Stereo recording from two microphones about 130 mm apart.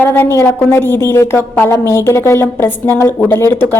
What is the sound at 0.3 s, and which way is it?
A woman's voice, 20° left (ahead or behind).